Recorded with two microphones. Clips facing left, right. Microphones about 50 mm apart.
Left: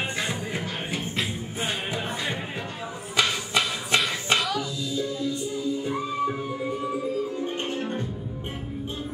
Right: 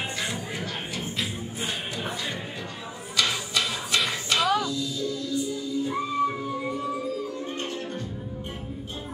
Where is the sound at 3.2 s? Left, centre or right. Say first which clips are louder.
Left 2 dB; left.